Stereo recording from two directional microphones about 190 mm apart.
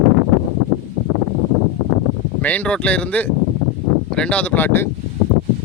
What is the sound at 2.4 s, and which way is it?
Speech, 10° left (ahead or behind).